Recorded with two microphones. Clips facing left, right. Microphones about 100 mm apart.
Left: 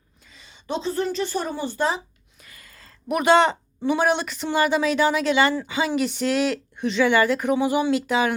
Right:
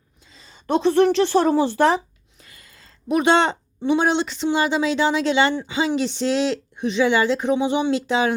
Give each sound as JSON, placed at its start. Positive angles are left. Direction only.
{"t": 0.3, "sound": "a sound", "side_deg": -35}
{"t": 0.7, "sound": "speech", "side_deg": -65}
{"t": 2.4, "sound": "a woman's voice", "side_deg": -25}